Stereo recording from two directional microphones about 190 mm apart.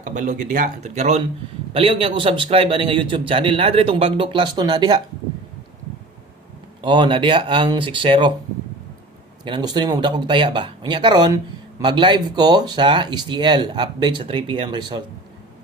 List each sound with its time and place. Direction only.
0.0 s a man's voice: 40° right (ahead or behind); by 4.9 s 25° right (ahead or behind)
6.8 s a man's voice: 25° right (ahead or behind)
9.4 s a man's voice: 20° right (ahead or behind)